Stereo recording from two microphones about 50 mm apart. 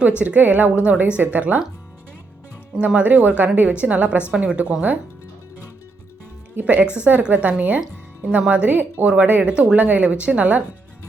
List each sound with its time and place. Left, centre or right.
0.2 s a woman's voice: right
2.8 s a woman's voice: right
6.6 s a woman's voice: right